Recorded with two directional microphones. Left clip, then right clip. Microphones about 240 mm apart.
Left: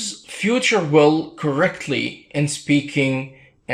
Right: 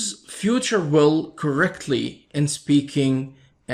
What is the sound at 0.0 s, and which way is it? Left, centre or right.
Speech, right.